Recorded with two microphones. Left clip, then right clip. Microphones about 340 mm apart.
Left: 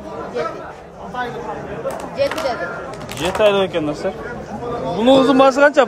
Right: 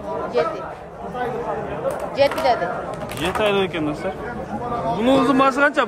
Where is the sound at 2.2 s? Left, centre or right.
Right.